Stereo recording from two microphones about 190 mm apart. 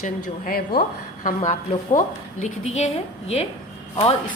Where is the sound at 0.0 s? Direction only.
50° left (ahead or behind).